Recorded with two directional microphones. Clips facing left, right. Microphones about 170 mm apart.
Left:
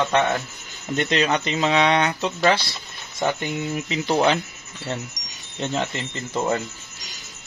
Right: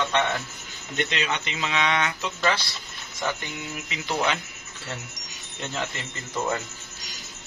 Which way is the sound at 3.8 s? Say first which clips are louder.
Left 6 dB; 35° left (ahead or behind).